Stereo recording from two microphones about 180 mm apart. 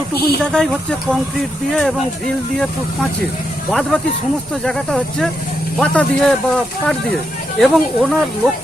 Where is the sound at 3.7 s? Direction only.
5° left (ahead or behind).